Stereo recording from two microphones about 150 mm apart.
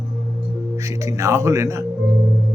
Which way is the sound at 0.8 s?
20° right (ahead or behind).